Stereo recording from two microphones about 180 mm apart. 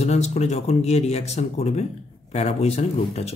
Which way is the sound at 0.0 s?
35° left (ahead or behind).